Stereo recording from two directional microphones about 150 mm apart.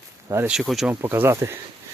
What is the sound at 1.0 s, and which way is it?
Speech, 15° right (ahead or behind).